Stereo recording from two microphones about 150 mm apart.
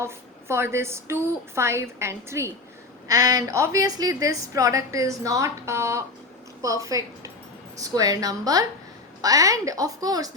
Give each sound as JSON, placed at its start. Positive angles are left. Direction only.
{"t": 0.0, "sound": "a woman's voice", "side_deg": -15}